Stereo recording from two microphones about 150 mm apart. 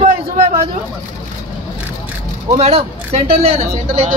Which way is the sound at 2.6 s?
40° right (ahead or behind).